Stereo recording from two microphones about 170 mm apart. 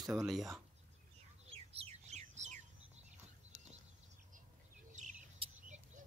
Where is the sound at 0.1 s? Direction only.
Centre (ahead or behind).